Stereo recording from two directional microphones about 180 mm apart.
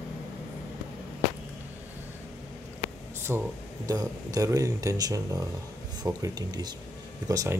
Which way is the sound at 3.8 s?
20° right (ahead or behind).